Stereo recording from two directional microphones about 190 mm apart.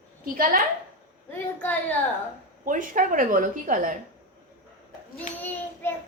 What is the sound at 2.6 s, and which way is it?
A woman's voice, 45° right (ahead or behind).